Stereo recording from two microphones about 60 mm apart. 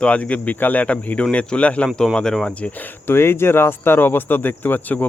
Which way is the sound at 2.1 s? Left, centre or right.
Centre.